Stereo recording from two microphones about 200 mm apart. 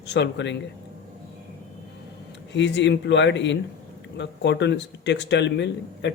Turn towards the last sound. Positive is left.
turn(degrees=60)  # may be behind; listen again after turning